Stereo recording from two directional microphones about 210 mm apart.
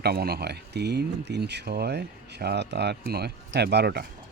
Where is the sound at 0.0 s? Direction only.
50° right (ahead or behind).